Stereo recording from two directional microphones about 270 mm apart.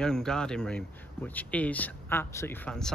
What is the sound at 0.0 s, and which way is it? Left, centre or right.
Speech, centre.